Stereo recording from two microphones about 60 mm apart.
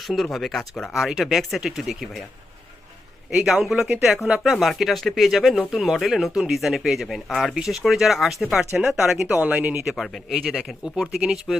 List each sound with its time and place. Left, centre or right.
0.1 s speech: centre
3.3 s speech: centre; by 9.7 s right
10.0 s speech: centre